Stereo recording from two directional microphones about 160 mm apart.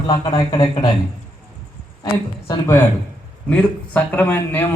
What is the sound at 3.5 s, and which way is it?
A man's voice, 10° left (ahead or behind).